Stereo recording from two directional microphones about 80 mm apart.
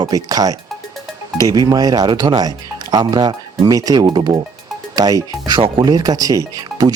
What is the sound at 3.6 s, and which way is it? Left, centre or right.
Speech, right.